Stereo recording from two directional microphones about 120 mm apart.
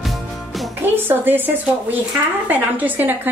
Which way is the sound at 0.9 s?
15° right (ahead or behind).